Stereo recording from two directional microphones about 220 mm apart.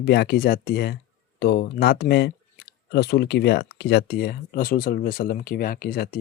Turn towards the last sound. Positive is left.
turn(degrees=45)  # may be behind; listen again after turning